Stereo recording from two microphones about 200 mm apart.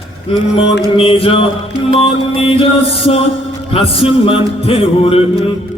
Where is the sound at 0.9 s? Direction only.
25° left (ahead or behind).